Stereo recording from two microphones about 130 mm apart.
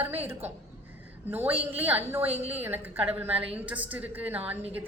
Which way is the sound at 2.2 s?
50° right (ahead or behind).